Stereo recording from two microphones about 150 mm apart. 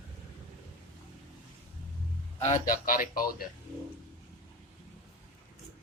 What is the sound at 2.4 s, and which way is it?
Speech, 60° left (ahead or behind).